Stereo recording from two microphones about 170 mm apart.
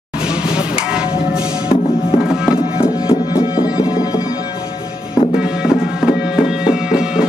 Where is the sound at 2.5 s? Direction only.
20° left (ahead or behind).